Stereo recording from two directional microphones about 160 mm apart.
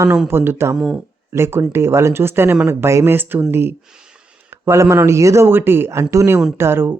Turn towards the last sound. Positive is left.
turn(degrees=-15)  # may be behind; listen again after turning